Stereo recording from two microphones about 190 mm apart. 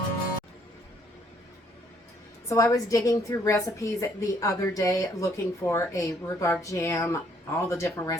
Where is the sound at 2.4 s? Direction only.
15° left (ahead or behind).